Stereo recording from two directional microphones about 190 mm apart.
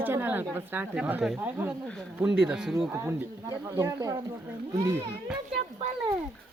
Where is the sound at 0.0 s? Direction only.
10° right (ahead or behind).